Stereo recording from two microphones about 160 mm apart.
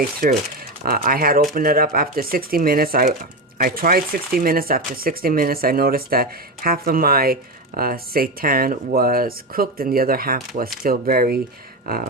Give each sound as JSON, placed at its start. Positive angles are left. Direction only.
{"t": 0.2, "sound": "speech", "side_deg": -70}